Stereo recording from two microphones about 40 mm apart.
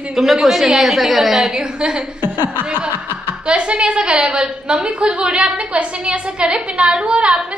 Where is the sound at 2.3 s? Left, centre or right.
Right.